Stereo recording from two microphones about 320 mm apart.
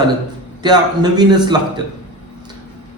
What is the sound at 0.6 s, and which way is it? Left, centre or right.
A man's voice, centre.